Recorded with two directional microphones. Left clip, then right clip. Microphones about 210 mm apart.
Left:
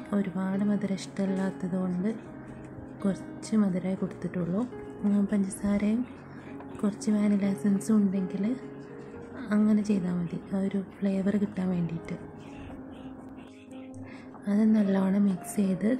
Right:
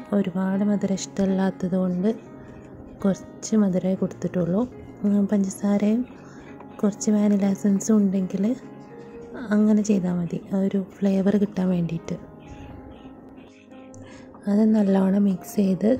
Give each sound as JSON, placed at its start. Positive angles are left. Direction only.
{"t": 0.1, "sound": "a woman's voice", "side_deg": -20}
{"t": 9.3, "sound": "music", "side_deg": -20}
{"t": 9.7, "sound": "a woman's voice", "side_deg": -25}
{"t": 14.4, "sound": "a woman's voice", "side_deg": -20}